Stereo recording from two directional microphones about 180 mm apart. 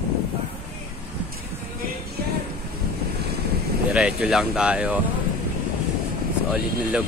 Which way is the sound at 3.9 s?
5° right (ahead or behind).